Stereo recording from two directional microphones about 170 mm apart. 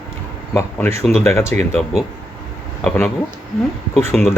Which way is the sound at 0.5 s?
15° left (ahead or behind).